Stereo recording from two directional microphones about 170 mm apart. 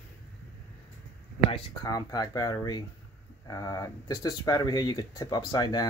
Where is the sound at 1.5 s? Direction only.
25° left (ahead or behind).